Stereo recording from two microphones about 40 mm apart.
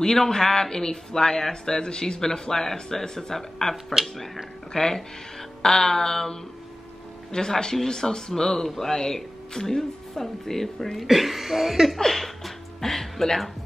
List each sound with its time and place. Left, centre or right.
0.0 s speech: centre
4.7 s speech: centre
7.3 s speech: centre
11.1 s speech: centre
12.0 s music: centre